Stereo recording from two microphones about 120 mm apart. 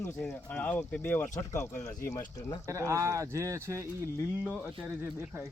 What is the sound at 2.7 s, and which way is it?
Speech, 25° right (ahead or behind).